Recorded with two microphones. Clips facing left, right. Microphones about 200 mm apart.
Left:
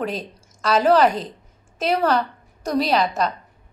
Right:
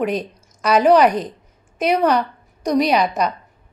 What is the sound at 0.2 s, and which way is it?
A woman's voice, 15° right (ahead or behind).